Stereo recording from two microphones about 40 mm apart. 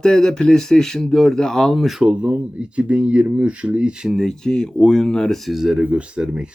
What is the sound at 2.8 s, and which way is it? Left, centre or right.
Speech, right.